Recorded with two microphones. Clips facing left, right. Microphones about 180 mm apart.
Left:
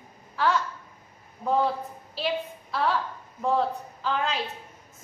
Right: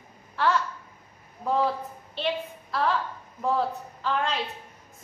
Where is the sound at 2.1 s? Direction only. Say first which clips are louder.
Even; centre (ahead or behind).